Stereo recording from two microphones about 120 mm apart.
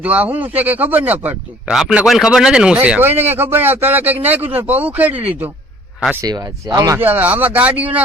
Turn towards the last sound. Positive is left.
turn(degrees=-15)  # may be behind; listen again after turning